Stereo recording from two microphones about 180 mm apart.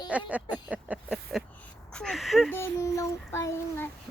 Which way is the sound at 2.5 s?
15° left (ahead or behind).